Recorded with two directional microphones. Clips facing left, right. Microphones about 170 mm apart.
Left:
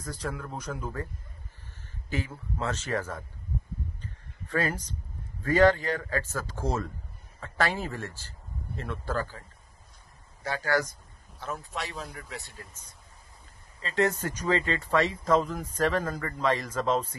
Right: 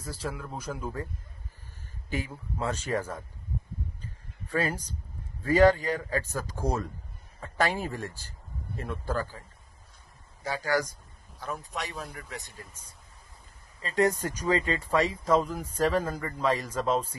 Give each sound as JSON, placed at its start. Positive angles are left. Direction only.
{"t": 0.0, "sound": "speech", "side_deg": -5}
{"t": 2.0, "sound": "speech", "side_deg": -15}
{"t": 4.5, "sound": "speech", "side_deg": -10}
{"t": 10.4, "sound": "speech", "side_deg": -10}
{"t": 12.0, "sound": "a man's voice", "side_deg": 0}
{"t": 12.4, "sound": "speech", "side_deg": -15}